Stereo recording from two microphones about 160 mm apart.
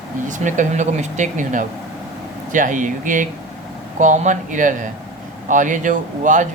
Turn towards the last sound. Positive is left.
turn(degrees=-50)  # may be behind; listen again after turning